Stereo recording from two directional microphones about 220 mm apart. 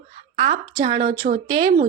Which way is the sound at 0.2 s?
35° right (ahead or behind).